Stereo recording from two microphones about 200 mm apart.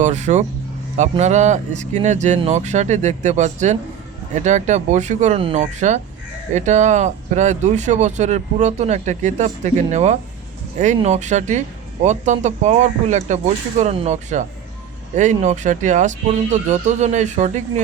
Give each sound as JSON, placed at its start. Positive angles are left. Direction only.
{"t": 0.0, "sound": "speech", "side_deg": -35}